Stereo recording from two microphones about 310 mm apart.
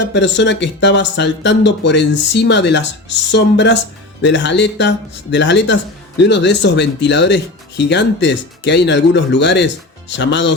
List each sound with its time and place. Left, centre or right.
0.1 s speech: left